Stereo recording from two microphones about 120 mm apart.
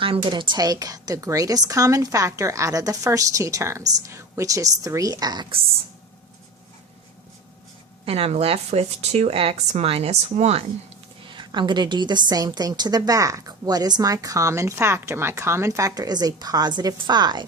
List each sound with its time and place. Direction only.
0.3 s a woman's voice: 40° right (ahead or behind)
8.0 s speech: 55° right (ahead or behind)
11.3 s a woman's voice: 40° right (ahead or behind)